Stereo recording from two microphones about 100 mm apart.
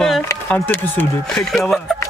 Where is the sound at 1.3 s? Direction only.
5° left (ahead or behind).